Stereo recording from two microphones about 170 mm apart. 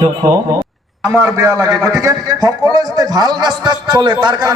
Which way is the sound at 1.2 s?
20° right (ahead or behind).